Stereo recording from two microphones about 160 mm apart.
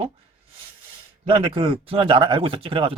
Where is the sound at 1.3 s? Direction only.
30° right (ahead or behind).